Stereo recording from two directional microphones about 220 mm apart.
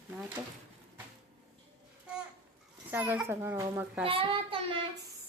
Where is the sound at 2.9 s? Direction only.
10° right (ahead or behind).